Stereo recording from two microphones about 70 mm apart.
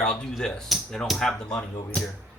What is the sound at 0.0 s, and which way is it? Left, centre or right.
Speech, centre.